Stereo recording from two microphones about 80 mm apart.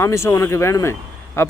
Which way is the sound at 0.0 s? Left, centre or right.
Left.